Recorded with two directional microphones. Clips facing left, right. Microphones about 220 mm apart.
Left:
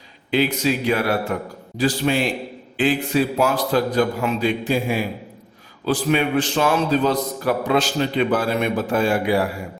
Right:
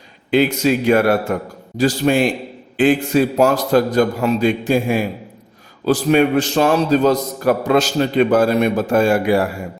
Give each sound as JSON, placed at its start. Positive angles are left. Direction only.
{"t": 0.3, "sound": "a man's voice", "side_deg": -50}